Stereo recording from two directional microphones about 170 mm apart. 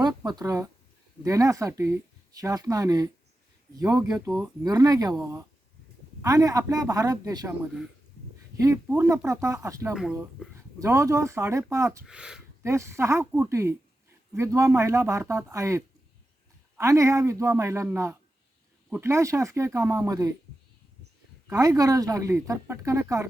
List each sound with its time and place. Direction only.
0.3 s speech: 20° right (ahead or behind)
4.6 s a man's voice: 20° right (ahead or behind)
12.0 s speech: 5° right (ahead or behind)
12.6 s a man's voice: 15° right (ahead or behind)
21.4 s speech: 20° right (ahead or behind)